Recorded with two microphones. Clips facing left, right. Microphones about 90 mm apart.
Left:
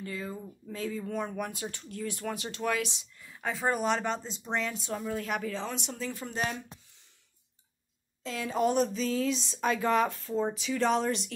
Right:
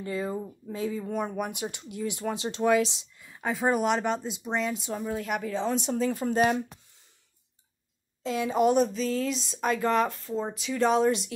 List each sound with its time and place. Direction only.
0.0 s speech: 25° right (ahead or behind)
0.7 s speech: 15° right (ahead or behind)
3.2 s speech: 15° right (ahead or behind)
5.8 s speech: 35° right (ahead or behind)
8.2 s speech: 20° right (ahead or behind)